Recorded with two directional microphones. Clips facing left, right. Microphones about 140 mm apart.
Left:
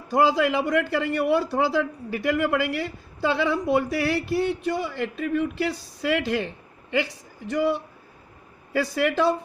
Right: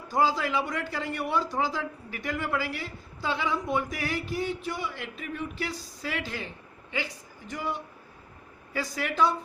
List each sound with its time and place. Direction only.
0.3 s a woman's voice: 70° left (ahead or behind)